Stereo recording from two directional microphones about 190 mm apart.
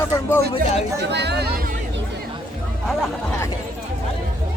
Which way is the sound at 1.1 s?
60° right (ahead or behind).